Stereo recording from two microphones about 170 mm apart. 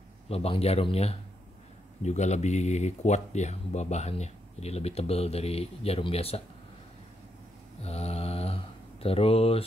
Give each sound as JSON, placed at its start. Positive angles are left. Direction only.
{"t": 0.3, "sound": "speech", "side_deg": 35}
{"t": 7.8, "sound": "mantra", "side_deg": 40}